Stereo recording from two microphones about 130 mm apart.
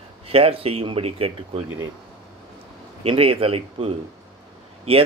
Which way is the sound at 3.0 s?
45° right (ahead or behind).